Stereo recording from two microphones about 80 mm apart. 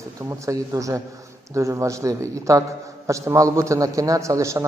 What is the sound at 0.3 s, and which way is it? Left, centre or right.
A man's voice, right.